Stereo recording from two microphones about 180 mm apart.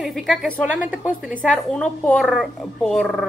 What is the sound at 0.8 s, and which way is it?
Speech, 5° right (ahead or behind).